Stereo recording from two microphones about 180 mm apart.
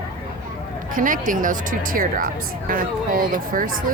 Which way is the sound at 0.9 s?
50° right (ahead or behind).